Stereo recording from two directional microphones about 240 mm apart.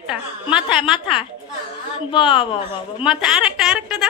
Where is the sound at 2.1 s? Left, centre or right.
Left.